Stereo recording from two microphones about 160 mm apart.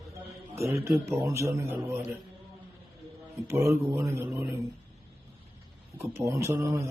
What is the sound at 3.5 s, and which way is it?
Speech, 20° right (ahead or behind).